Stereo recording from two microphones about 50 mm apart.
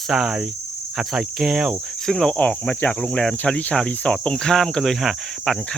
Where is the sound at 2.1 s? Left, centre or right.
Centre.